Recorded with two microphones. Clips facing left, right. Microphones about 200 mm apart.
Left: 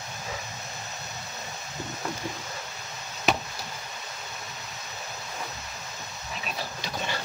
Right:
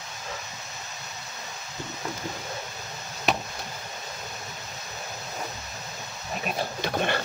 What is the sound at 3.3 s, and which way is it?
Chop, centre (ahead or behind).